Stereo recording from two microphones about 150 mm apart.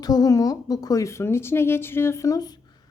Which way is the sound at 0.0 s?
25° left (ahead or behind).